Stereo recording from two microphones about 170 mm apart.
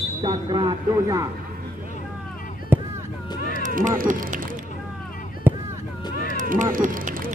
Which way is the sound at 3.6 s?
50° right (ahead or behind).